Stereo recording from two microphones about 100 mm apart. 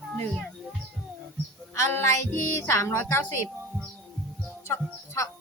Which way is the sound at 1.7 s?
25° left (ahead or behind).